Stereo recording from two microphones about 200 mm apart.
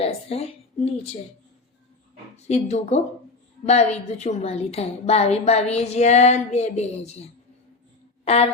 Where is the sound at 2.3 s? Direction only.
35° left (ahead or behind).